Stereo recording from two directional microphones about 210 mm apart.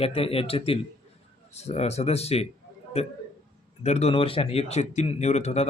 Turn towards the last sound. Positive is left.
turn(degrees=30)  # may be behind; listen again after turning